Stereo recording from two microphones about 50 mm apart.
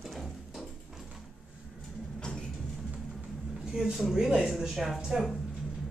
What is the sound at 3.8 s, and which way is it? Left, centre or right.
Speech, centre.